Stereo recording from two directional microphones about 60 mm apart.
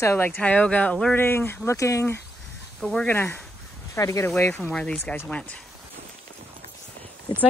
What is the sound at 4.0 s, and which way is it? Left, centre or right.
Speech, left.